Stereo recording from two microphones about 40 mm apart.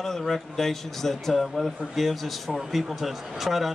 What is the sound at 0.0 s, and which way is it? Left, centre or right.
A man's voice, centre.